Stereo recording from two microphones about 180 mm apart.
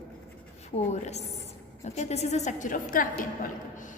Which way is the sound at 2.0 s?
35° left (ahead or behind).